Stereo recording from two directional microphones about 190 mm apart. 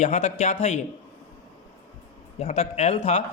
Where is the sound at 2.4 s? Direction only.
35° left (ahead or behind).